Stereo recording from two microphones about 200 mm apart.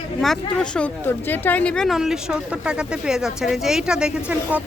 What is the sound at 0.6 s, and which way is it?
Speech, 5° left (ahead or behind).